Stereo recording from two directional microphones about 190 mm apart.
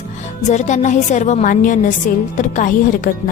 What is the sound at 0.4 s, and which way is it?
A woman's voice, 40° left (ahead or behind).